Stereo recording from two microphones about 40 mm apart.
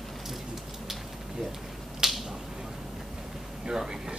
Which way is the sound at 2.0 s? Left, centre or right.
Centre.